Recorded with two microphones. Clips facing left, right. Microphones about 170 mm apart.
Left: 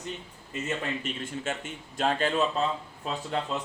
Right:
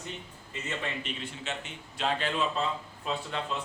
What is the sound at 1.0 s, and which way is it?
Speech, 45° left (ahead or behind).